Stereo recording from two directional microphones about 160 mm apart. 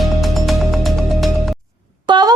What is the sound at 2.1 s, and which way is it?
Music, 25° right (ahead or behind).